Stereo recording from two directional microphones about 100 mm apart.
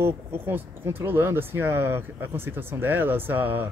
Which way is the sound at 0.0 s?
25° right (ahead or behind).